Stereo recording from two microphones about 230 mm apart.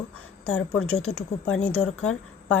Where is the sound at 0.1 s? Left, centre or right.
Left.